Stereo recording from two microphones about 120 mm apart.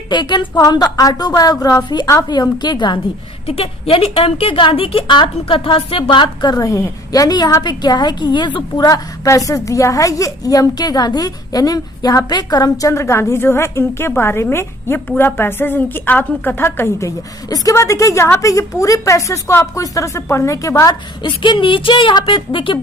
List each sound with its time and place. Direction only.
0.1 s a woman's voice: 40° left (ahead or behind)
3.4 s a woman's voice: 55° left (ahead or behind); by 20.9 s 25° left (ahead or behind)
21.2 s speech: 40° left (ahead or behind)